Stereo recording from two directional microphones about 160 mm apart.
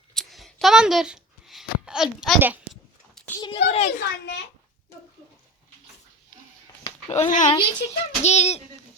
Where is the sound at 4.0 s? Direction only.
90° left.